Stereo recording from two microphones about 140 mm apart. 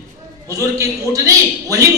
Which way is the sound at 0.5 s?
25° right (ahead or behind).